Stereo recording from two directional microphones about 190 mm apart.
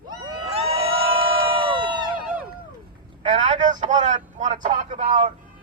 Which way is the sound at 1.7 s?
25° right (ahead or behind).